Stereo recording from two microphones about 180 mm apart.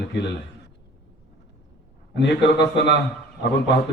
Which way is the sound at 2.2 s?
70° left (ahead or behind).